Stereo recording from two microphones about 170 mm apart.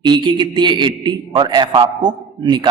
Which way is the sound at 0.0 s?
25° right (ahead or behind).